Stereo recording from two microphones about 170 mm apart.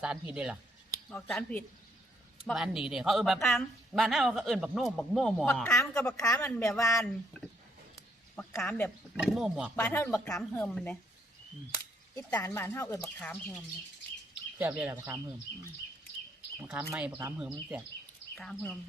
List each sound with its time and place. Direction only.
0.0 s a woman's voice: 5° right (ahead or behind)
1.1 s a woman's voice: 5° left (ahead or behind)
5.6 s speech: 15° left (ahead or behind)
6.2 s speech: 20° left (ahead or behind)
7.0 s speech: 5° left (ahead or behind)
9.1 s a woman's voice: centre (ahead or behind)
9.7 s speech: 15° left (ahead or behind)
10.2 s a woman's voice: centre (ahead or behind)
12.3 s speech: 10° left (ahead or behind)
14.6 s speech: 10° right (ahead or behind)
16.6 s speech: 10° right (ahead or behind)
18.3 s a woman's voice: 5° left (ahead or behind)